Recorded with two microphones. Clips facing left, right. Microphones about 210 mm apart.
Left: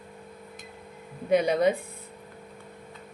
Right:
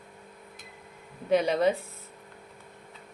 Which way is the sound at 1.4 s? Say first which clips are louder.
Left 1 dB; 15° left (ahead or behind).